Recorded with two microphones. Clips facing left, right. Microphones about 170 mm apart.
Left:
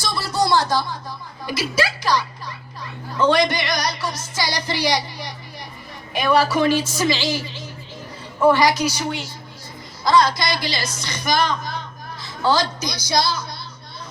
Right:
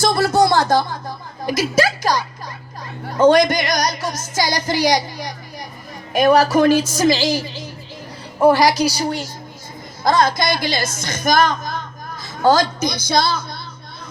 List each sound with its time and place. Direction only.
0.0 s a woman's voice: 50° right (ahead or behind)
10.0 s a woman's voice: 50° right (ahead or behind)